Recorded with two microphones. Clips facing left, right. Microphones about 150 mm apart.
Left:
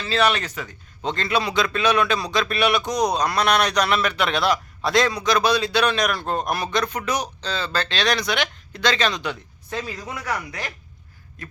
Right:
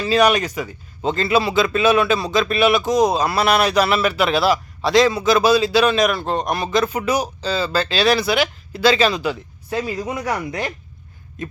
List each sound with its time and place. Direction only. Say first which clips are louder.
0.0 s a man's voice: right 5 dB; 10° right (ahead or behind)
10.0 s speech: right 6 dB; 20° right (ahead or behind)
11.4 s a sound: right 10 dB; 20° right (ahead or behind)